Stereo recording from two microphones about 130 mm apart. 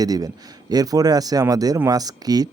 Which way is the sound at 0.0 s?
30° right (ahead or behind).